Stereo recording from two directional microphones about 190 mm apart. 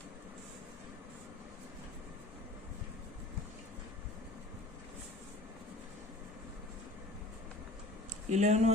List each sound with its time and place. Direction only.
8.3 s speech: 35° right (ahead or behind)